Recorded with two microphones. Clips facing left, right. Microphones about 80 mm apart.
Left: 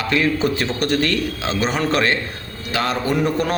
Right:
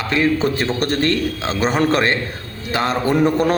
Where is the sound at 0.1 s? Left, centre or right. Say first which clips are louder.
Right 2 dB; right.